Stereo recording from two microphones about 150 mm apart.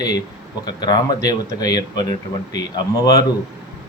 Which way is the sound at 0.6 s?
30° left (ahead or behind).